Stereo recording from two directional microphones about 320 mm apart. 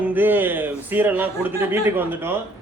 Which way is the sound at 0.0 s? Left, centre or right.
Centre.